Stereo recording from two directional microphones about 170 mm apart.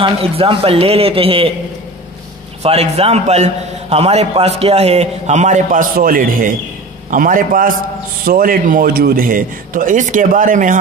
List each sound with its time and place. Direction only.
0.0 s a man's voice: 30° right (ahead or behind)
2.6 s a man's voice: 35° right (ahead or behind)